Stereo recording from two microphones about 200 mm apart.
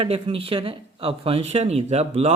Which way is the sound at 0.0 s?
30° right (ahead or behind).